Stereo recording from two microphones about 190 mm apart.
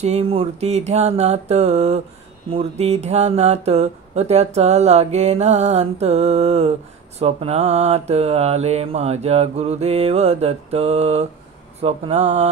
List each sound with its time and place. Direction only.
0.0 s speech: 30° right (ahead or behind)